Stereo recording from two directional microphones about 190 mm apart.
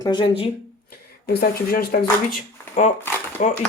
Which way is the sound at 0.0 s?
25° left (ahead or behind).